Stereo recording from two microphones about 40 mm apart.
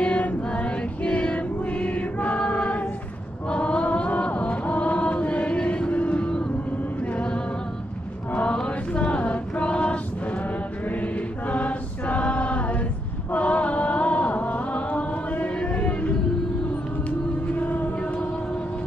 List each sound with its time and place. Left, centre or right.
0.0 s choir: left
3.4 s chant: left
7.1 s music: left
8.3 s chant: left
10.9 s choir: left
13.3 s music: left
17.6 s music: left